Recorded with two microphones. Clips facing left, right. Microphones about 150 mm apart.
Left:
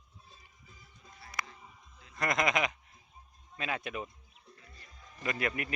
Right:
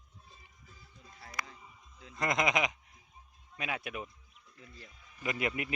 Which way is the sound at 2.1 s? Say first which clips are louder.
Even; 20° right (ahead or behind).